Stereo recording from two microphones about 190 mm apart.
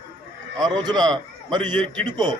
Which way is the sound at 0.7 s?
20° right (ahead or behind).